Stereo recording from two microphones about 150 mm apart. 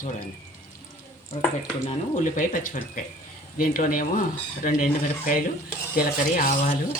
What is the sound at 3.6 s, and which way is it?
Speech, 65° left (ahead or behind).